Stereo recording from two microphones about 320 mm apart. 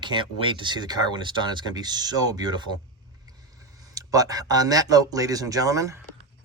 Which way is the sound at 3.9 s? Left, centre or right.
Centre.